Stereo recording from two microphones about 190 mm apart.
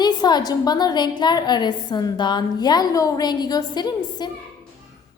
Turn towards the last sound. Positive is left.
turn(degrees=20)  # may be behind; listen again after turning